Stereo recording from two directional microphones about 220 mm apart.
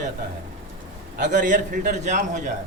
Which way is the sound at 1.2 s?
35° right (ahead or behind).